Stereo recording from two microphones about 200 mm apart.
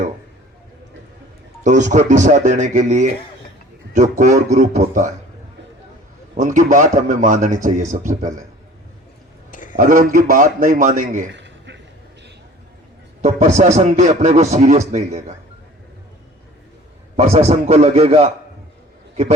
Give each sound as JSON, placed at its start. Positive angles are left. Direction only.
{"t": 1.6, "sound": "a man's voice", "side_deg": -35}
{"t": 6.3, "sound": "a man's voice", "side_deg": -40}
{"t": 9.5, "sound": "a sound", "side_deg": 40}
{"t": 9.7, "sound": "a man's voice", "side_deg": -45}
{"t": 11.3, "sound": "a sound", "side_deg": -60}
{"t": 13.6, "sound": "a man's voice", "side_deg": -35}
{"t": 17.2, "sound": "a man's voice", "side_deg": -30}